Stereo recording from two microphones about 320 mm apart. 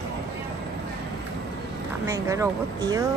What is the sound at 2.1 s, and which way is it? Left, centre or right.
Speech, centre.